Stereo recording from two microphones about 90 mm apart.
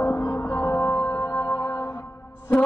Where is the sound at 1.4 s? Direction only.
30° left (ahead or behind).